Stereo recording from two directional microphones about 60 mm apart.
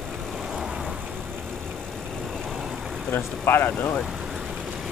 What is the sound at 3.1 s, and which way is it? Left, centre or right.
Speech, left.